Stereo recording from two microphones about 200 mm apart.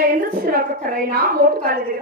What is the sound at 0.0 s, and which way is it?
A woman's voice, 45° right (ahead or behind).